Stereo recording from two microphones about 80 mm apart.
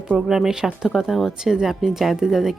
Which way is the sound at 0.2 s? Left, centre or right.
Centre.